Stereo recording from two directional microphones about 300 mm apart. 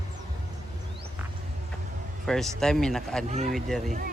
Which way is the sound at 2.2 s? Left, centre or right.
Centre.